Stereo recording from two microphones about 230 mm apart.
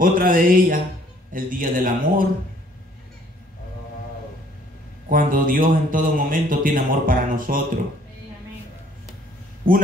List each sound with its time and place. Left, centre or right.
0.0 s a man's voice: right
5.1 s a man's voice: right